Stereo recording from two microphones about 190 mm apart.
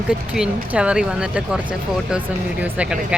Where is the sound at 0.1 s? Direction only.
5° right (ahead or behind).